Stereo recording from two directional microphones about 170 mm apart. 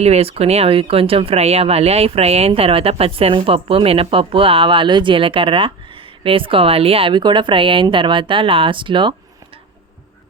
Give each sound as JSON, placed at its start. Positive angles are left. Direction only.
{"t": 0.0, "sound": "speech", "side_deg": -35}